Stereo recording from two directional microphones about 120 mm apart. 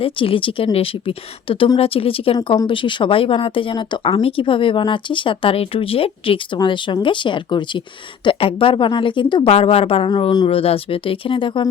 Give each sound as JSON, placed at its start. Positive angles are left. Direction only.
{"t": 0.0, "sound": "speech", "side_deg": 50}